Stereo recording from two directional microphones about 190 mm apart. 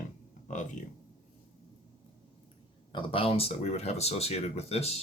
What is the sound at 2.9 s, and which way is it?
Speech, 30° left (ahead or behind).